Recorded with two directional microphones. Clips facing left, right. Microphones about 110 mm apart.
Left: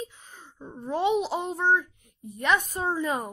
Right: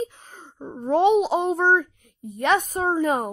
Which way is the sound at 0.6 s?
40° right (ahead or behind).